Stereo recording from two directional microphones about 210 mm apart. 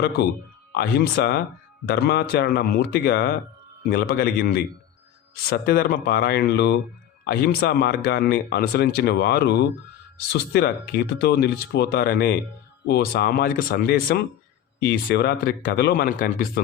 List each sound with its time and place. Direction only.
0.7 s speech: 50° left (ahead or behind)